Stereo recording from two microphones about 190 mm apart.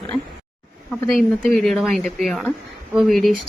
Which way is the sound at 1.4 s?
Centre (ahead or behind).